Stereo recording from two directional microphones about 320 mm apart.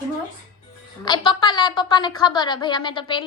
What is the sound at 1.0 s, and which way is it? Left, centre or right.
A woman's voice, centre.